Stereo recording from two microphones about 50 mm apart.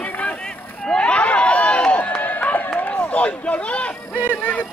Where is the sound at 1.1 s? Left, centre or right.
Left.